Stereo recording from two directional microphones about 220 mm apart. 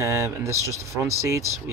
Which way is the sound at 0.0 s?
15° right (ahead or behind).